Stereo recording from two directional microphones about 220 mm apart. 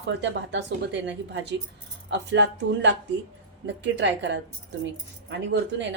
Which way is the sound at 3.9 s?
55° right (ahead or behind).